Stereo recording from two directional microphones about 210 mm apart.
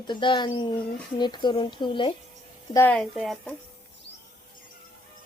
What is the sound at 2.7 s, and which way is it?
Speech, 15° left (ahead or behind).